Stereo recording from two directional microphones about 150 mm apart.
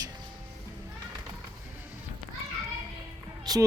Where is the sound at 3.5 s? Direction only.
25° right (ahead or behind).